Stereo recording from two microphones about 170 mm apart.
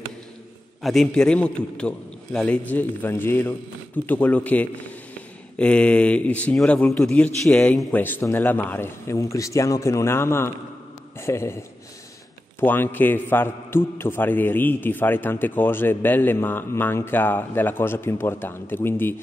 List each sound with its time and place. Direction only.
0.8 s a man's voice: centre (ahead or behind)